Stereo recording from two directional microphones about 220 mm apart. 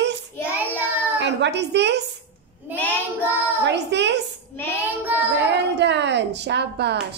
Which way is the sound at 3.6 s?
50° right (ahead or behind).